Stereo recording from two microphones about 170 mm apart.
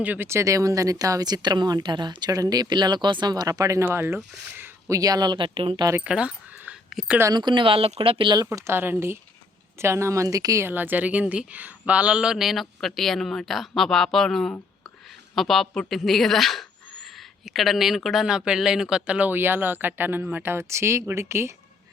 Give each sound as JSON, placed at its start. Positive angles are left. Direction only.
{"t": 0.0, "sound": "speech", "side_deg": -10}
{"t": 5.9, "sound": "speech", "side_deg": -5}
{"t": 7.3, "sound": "speech", "side_deg": -25}